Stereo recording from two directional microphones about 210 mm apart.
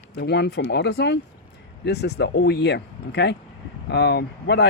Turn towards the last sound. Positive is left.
turn(degrees=55)  # may be behind; listen again after turning